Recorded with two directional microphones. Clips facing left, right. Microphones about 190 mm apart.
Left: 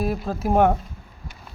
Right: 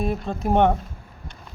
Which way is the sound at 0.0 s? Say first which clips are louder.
Left 1 dB; 5° left (ahead or behind).